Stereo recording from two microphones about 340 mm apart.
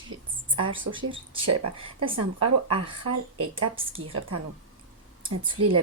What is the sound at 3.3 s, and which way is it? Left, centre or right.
Speech, right.